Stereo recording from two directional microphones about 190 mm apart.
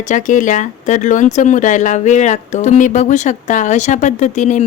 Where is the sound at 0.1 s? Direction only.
40° left (ahead or behind).